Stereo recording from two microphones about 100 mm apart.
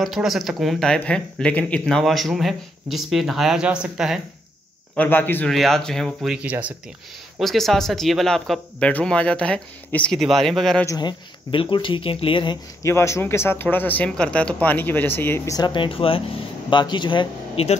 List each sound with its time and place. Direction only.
0.0 s speech: centre (ahead or behind)
4.9 s a man's voice: 20° left (ahead or behind)
5.5 s speech: 5° left (ahead or behind)
6.2 s speech: 10° right (ahead or behind)
7.3 s speech: centre (ahead or behind)
11.0 s speech: 55° left (ahead or behind)
12.8 s speech: 30° left (ahead or behind)
15.5 s speech: 50° left (ahead or behind); by 16.2 s 65° left (ahead or behind)
16.7 s speech: 50° left (ahead or behind)
17.6 s speech: 85° left